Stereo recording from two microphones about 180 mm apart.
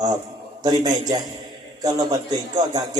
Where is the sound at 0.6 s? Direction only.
25° right (ahead or behind).